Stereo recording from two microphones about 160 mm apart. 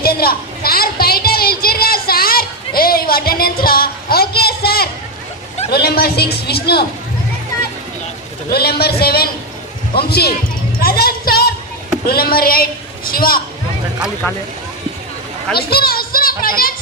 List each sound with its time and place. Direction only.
0.0 s a sound: 70° left (ahead or behind)
5.7 s a man's voice: 80° left
8.4 s a man's voice: 75° left (ahead or behind)
15.5 s a child's voice: 75° left (ahead or behind)